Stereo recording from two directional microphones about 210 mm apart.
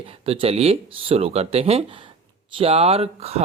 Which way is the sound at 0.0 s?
25° right (ahead or behind).